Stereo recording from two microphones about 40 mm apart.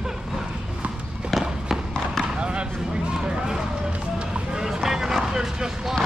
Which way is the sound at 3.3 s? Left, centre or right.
Centre.